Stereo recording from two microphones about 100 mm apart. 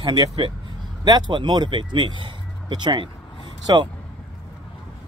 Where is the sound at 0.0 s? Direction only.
50° right (ahead or behind).